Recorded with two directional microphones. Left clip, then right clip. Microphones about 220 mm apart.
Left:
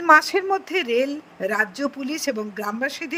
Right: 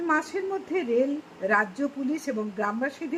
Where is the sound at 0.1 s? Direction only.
30° left (ahead or behind).